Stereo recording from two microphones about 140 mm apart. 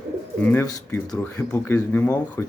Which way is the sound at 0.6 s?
15° left (ahead or behind).